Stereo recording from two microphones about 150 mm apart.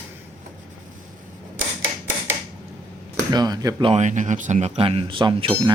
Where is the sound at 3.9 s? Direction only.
50° right (ahead or behind); by 5.5 s 35° right (ahead or behind).